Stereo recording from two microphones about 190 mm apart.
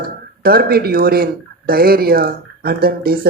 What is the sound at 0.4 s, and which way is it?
Speech, 55° right (ahead or behind).